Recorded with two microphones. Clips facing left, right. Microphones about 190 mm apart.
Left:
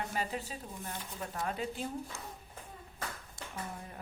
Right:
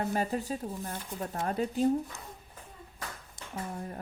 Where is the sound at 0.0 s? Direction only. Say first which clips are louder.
Right 6 dB; 45° right (ahead or behind).